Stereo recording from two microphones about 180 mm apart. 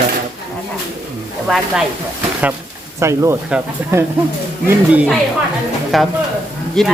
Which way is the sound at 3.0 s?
15° right (ahead or behind).